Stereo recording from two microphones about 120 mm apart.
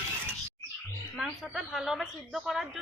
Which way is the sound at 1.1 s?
Centre (ahead or behind).